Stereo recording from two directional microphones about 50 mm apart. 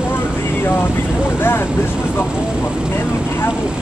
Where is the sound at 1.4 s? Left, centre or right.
Left.